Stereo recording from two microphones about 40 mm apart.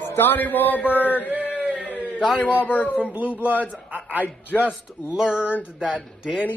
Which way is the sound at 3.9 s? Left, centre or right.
Right.